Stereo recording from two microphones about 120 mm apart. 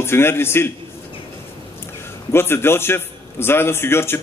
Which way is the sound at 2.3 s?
20° left (ahead or behind).